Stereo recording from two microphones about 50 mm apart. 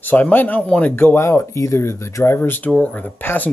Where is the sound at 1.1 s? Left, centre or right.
Left.